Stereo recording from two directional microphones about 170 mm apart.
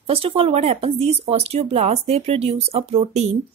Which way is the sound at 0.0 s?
35° right (ahead or behind).